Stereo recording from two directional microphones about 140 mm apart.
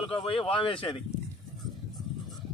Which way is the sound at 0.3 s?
40° left (ahead or behind).